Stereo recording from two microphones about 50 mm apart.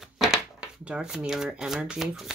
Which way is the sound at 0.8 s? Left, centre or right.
Centre.